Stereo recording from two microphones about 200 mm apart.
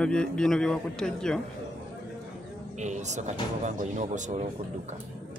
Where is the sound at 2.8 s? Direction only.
35° right (ahead or behind).